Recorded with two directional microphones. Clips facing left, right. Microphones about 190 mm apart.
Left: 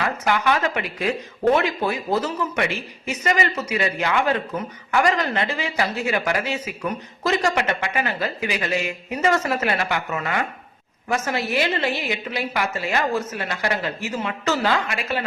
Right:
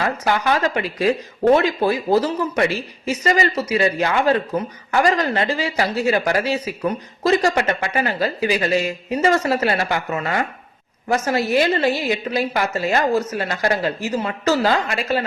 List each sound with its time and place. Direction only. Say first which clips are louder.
0.0 s speech: right 2 dB; 35° right (ahead or behind)